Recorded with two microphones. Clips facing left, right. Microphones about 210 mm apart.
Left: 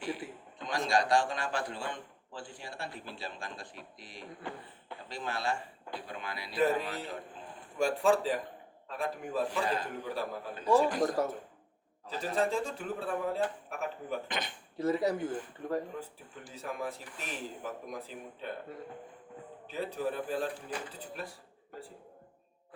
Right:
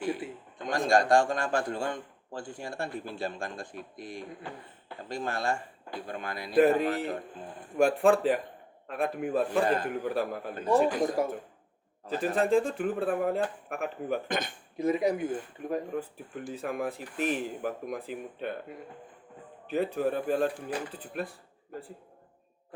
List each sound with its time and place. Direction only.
0.2 s a sound: 20° right (ahead or behind)
0.6 s a man's voice: 50° right (ahead or behind)
10.8 s speech: centre (ahead or behind)
12.0 s speech: 55° right (ahead or behind)
14.8 s speech: 15° right (ahead or behind)
16.0 s speech: 55° right (ahead or behind)
19.6 s speech: 55° right (ahead or behind)